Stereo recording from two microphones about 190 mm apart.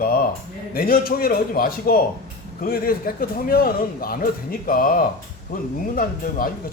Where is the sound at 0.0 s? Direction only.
50° left (ahead or behind).